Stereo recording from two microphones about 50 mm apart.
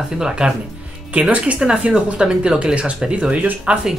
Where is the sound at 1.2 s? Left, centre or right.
Right.